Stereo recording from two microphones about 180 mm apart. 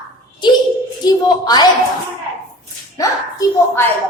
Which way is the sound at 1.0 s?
20° left (ahead or behind).